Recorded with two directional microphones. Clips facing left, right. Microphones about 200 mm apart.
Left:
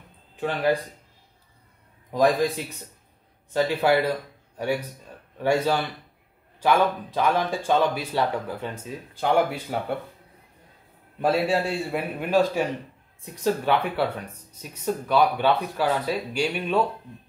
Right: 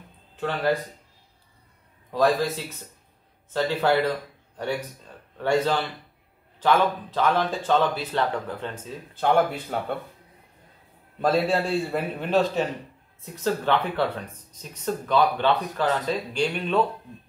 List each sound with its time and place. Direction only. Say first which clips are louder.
0.4 s speech: left 1 dB; 15° left (ahead or behind)
2.1 s speech: left 1 dB; 15° left (ahead or behind)
11.1 s speech: even; 10° left (ahead or behind)